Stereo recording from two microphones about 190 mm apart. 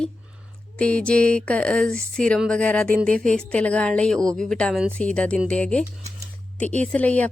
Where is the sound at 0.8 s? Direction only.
5° left (ahead or behind).